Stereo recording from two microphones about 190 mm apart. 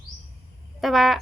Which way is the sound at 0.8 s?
Centre (ahead or behind).